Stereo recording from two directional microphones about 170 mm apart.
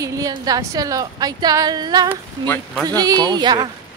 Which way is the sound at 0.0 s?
20° right (ahead or behind).